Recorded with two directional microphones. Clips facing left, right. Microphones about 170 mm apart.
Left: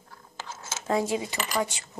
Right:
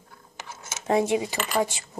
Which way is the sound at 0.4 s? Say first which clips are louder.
Left 1 dB; 15° right (ahead or behind).